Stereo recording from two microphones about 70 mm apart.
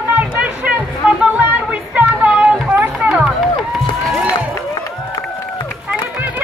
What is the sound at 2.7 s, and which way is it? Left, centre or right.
Music, centre.